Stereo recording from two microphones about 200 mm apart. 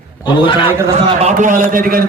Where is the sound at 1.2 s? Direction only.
35° right (ahead or behind).